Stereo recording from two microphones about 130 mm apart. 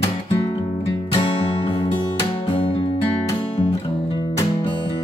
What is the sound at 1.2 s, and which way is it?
Music, 45° left (ahead or behind).